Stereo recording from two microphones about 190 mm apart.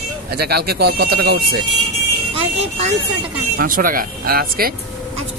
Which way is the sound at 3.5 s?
45° right (ahead or behind).